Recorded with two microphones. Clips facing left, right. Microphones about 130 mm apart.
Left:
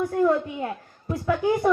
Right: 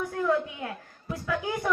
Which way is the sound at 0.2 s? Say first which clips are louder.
Left 4 dB; 30° left (ahead or behind).